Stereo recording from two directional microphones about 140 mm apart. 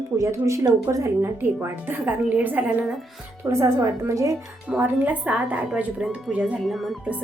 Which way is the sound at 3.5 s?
20° right (ahead or behind).